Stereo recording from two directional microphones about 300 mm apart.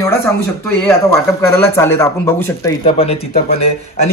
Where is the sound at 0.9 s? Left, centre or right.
Centre.